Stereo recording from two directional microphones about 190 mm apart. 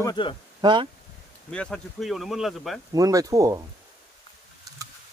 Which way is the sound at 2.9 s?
20° right (ahead or behind).